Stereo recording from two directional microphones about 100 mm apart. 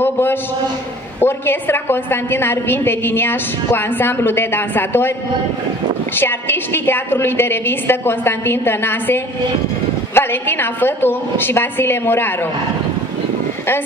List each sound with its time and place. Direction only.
0.0 s a sound: 20° left (ahead or behind)
1.2 s a woman's voice: 20° left (ahead or behind)
6.1 s a woman's voice: 20° left (ahead or behind)